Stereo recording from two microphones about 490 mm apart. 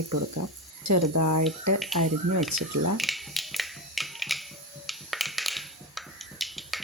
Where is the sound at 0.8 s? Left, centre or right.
Right.